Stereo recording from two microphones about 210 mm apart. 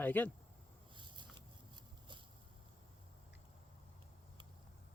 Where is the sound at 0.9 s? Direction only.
20° right (ahead or behind).